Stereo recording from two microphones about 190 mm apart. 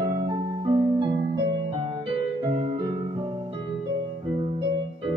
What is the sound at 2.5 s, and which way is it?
Music, 25° right (ahead or behind).